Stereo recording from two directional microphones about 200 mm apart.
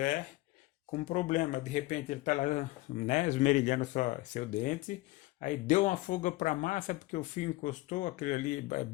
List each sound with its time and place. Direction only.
0.9 s speech: 40° left (ahead or behind)